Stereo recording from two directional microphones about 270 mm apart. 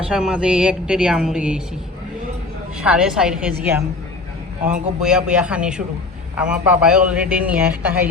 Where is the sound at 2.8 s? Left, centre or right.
Centre.